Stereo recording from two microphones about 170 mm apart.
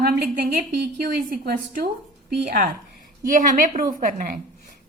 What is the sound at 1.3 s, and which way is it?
Speech, 65° right (ahead or behind).